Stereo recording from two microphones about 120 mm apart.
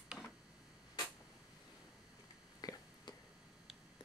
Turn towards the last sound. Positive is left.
turn(degrees=35)  # may be behind; listen again after turning